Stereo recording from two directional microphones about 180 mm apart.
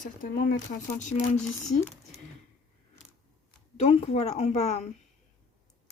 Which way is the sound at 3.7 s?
35° left (ahead or behind).